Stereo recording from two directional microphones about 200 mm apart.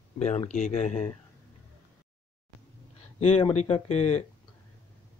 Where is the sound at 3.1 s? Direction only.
30° left (ahead or behind).